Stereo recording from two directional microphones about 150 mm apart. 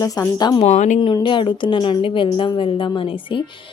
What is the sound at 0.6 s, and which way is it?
Speech, 50° left (ahead or behind).